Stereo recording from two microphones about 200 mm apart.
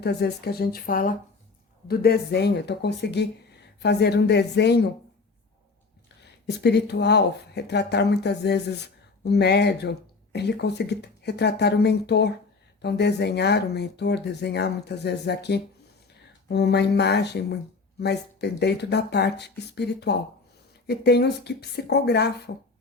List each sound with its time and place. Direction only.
0.0 s speech: 55° left (ahead or behind)
6.5 s speech: 55° left (ahead or behind)